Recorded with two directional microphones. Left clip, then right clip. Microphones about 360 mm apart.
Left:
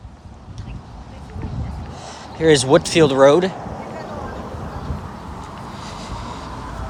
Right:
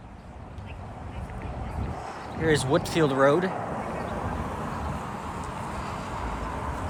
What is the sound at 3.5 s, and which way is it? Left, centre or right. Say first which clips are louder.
Vehicle: left 1 dB; right.